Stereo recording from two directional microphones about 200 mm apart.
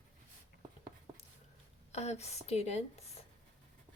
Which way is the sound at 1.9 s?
35° left (ahead or behind).